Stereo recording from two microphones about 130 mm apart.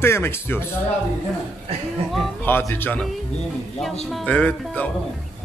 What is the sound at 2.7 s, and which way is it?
Speech, 15° left (ahead or behind).